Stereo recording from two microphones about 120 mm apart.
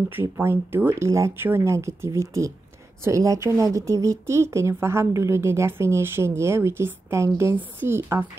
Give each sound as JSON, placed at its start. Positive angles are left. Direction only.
{"t": 0.1, "sound": "speech", "side_deg": -20}